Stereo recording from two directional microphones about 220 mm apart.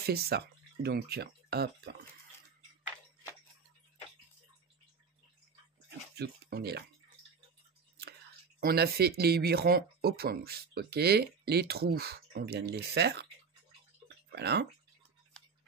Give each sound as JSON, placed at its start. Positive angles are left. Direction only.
{"t": 0.0, "sound": "speech", "side_deg": -45}
{"t": 6.1, "sound": "speech", "side_deg": -45}
{"t": 8.5, "sound": "speech", "side_deg": -45}
{"t": 14.0, "sound": "a sound", "side_deg": -50}